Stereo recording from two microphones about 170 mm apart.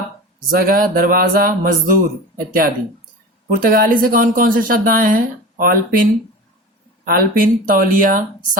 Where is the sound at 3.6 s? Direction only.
60° right (ahead or behind).